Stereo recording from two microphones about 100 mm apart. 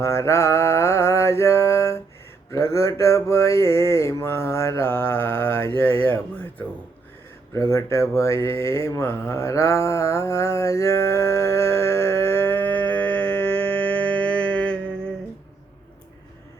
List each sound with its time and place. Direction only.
0.0 s mantra: 30° left (ahead or behind)
7.7 s mantra: 25° left (ahead or behind); by 15.1 s 10° left (ahead or behind)